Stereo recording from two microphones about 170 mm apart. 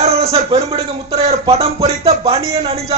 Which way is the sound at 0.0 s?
35° right (ahead or behind).